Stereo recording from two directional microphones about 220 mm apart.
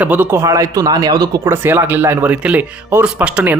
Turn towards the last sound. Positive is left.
turn(degrees=-5)  # may be behind; listen again after turning